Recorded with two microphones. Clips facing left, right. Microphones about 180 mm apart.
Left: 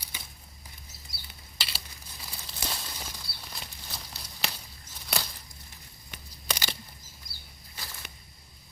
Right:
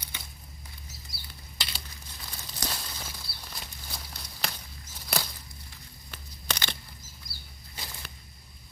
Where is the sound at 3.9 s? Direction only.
Centre (ahead or behind).